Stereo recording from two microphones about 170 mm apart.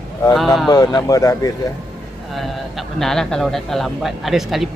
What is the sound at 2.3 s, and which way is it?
Speech, centre (ahead or behind).